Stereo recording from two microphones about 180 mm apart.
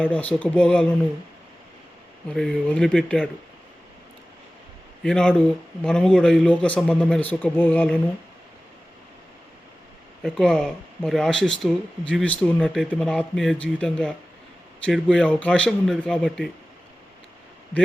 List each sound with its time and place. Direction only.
0.0 s a man's voice: 10° left (ahead or behind)
2.3 s speech: 5° left (ahead or behind)
5.0 s a man's voice: 5° left (ahead or behind)
10.2 s speech: 5° left (ahead or behind)